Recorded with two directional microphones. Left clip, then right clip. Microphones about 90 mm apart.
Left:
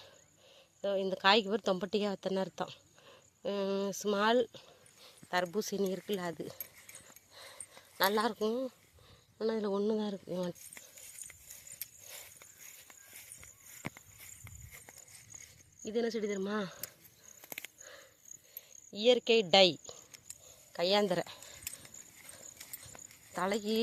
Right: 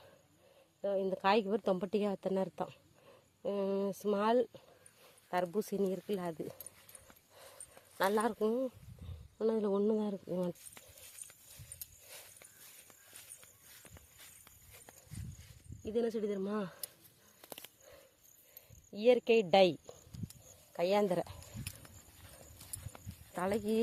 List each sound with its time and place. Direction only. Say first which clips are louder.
0.8 s speech: left 2 dB; 5° left (ahead or behind)
5.0 s dog: left 2 dB; 5° right (ahead or behind)
5.5 s speech: left 1 dB; 5° right (ahead or behind)
6.9 s dog: left 4 dB; 5° right (ahead or behind)
7.8 s a sound: left 2 dB; 15° right (ahead or behind)
8.4 s speech: even; 25° right (ahead or behind)
15.8 s speech: left 1 dB; 10° left (ahead or behind)
18.9 s a woman's voice: left 1 dB; 5° right (ahead or behind)
20.7 s a sound: left 1 dB; centre (ahead or behind)
22.9 s a sound: left 3 dB; centre (ahead or behind)